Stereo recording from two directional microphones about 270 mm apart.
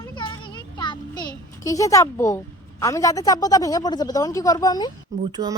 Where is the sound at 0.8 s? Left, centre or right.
Centre.